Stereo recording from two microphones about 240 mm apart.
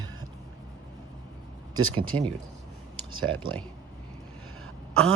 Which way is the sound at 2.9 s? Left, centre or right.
Right.